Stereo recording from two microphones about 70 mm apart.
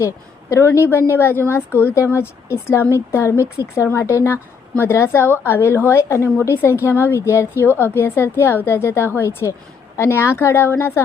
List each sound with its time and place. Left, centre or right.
0.5 s a woman's voice: left